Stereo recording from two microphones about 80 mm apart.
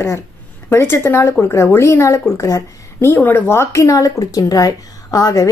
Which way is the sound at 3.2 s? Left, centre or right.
Left.